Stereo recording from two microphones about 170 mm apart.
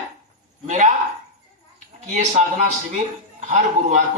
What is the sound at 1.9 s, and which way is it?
A man's voice, 45° right (ahead or behind).